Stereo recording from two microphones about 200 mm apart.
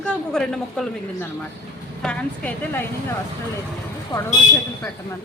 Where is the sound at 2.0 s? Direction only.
5° left (ahead or behind).